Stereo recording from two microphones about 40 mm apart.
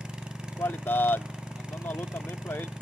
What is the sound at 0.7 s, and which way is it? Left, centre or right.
Speech, left.